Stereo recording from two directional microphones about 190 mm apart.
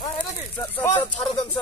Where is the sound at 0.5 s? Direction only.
10° left (ahead or behind).